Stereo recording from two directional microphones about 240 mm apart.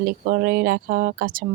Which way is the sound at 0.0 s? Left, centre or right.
Right.